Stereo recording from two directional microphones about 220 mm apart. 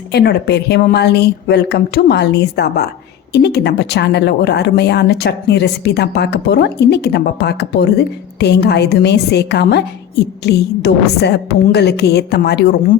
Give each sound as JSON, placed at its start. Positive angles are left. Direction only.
{"t": 0.1, "sound": "speech", "side_deg": 50}